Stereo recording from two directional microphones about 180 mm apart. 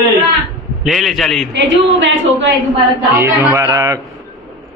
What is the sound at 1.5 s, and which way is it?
A woman's voice, 80° right.